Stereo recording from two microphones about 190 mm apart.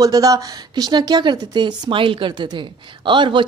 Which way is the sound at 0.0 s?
20° right (ahead or behind).